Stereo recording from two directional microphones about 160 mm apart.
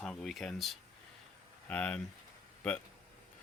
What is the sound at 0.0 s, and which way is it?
Speech, 5° left (ahead or behind).